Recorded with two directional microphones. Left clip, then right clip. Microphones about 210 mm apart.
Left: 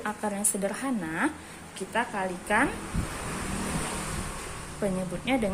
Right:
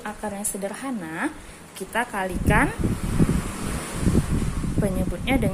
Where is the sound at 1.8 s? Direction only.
20° right (ahead or behind).